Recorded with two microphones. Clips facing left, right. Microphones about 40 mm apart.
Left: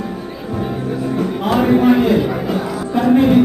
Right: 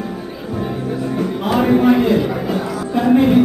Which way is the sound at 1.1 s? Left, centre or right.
Centre.